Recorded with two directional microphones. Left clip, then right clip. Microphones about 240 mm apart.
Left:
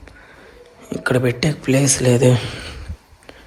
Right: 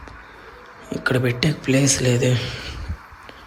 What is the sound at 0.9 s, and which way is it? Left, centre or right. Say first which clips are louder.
Speech: left 3 dB; centre.